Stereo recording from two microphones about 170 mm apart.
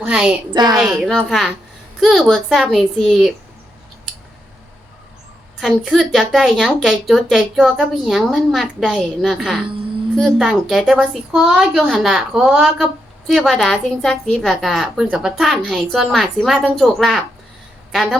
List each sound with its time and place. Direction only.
0.0 s a woman's voice: 5° right (ahead or behind)
0.5 s a woman's voice: 25° right (ahead or behind)
0.9 s a woman's voice: centre (ahead or behind)
5.5 s a woman's voice: centre (ahead or behind)